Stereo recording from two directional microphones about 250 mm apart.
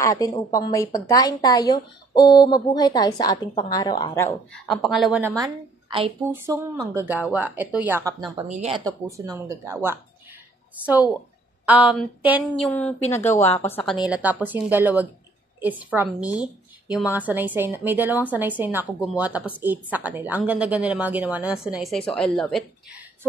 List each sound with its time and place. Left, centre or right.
0.0 s a woman's voice: centre
11.6 s a woman's voice: centre
14.0 s a woman's voice: centre